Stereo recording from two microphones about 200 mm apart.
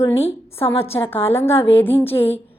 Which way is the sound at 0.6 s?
30° left (ahead or behind).